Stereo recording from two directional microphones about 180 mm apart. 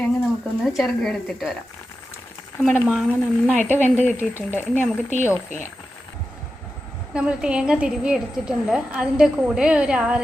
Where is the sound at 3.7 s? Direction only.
40° right (ahead or behind).